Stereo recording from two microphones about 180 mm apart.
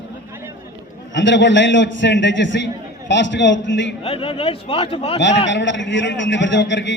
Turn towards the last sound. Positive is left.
turn(degrees=80)